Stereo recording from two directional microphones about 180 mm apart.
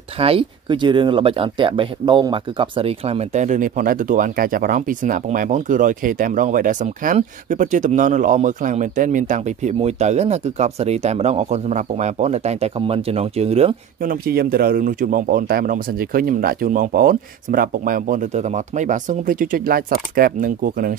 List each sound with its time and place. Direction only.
0.2 s speech: 30° right (ahead or behind)
14.0 s speech: 55° right (ahead or behind)